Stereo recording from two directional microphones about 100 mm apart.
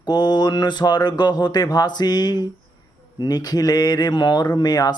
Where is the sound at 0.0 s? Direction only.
45° left (ahead or behind).